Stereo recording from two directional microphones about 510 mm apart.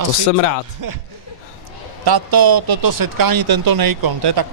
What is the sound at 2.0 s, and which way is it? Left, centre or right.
Speech, right.